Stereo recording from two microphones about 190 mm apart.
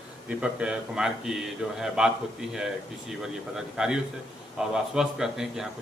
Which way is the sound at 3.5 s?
Centre (ahead or behind).